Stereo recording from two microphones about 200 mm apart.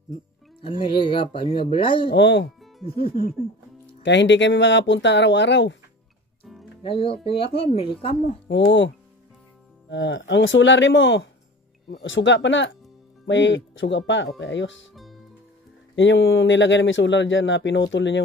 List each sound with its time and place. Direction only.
0.6 s speech: 25° left (ahead or behind)
2.0 s speech: 65° left (ahead or behind)
2.8 s speech: 30° left (ahead or behind)
4.0 s speech: 65° left (ahead or behind)
6.4 s music: centre (ahead or behind)
6.8 s speech: 25° left (ahead or behind)
8.5 s speech: 65° left (ahead or behind)
15.0 s music: centre (ahead or behind)
16.0 s speech: 70° left (ahead or behind)